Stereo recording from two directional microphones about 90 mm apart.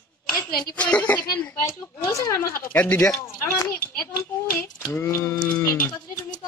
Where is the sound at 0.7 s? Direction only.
15° left (ahead or behind).